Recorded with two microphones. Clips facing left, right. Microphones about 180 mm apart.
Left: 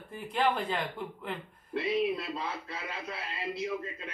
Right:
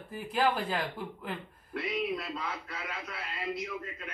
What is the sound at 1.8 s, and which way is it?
Speech, 30° left (ahead or behind).